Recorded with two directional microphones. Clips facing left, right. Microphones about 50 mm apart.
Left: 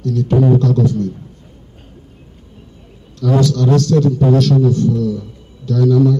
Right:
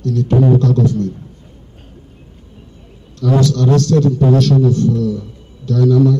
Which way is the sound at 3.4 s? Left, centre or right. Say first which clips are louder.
Even; right.